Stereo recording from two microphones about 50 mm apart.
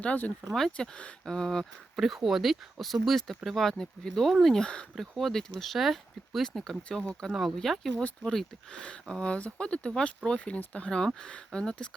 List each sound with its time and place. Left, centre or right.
0.5 s speech: centre
2.0 s speech: centre
4.6 s speech: centre
4.9 s speech: centre
6.8 s speech: centre